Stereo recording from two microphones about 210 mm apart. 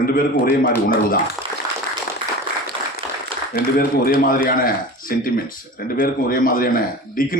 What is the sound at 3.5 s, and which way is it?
A man's voice, 45° left (ahead or behind).